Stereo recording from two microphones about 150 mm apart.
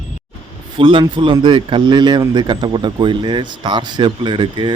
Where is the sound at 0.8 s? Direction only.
35° right (ahead or behind).